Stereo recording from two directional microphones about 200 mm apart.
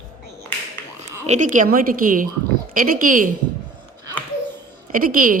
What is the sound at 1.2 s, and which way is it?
A woman's voice, 35° right (ahead or behind).